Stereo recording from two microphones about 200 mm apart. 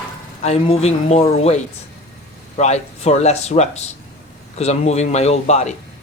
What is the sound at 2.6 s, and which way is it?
Speech, 35° left (ahead or behind).